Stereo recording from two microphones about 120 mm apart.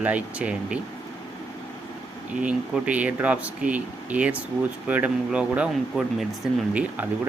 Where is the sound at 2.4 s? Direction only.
10° right (ahead or behind).